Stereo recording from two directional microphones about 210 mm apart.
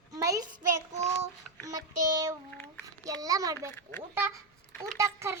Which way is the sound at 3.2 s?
15° right (ahead or behind).